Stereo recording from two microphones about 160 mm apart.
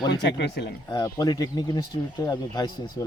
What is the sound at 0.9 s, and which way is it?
Speech, 25° left (ahead or behind).